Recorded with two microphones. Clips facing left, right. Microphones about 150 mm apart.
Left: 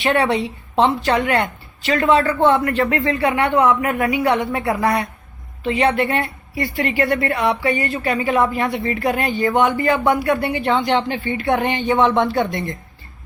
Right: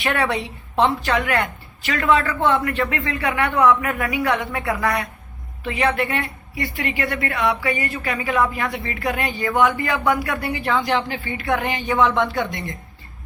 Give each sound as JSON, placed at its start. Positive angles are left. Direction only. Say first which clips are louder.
{"t": 0.0, "sound": "a woman's voice", "louder": "left 4 dB", "side_deg": 25}
{"t": 7.4, "sound": "a woman's voice", "louder": "left 3 dB", "side_deg": 25}